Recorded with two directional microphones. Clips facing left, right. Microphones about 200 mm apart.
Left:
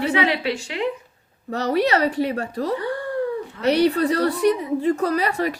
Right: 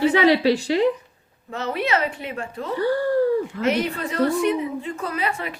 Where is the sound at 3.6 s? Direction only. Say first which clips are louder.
Left 5 dB; 35° left (ahead or behind).